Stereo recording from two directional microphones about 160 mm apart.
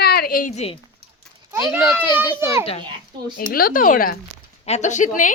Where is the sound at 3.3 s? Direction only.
60° left (ahead or behind).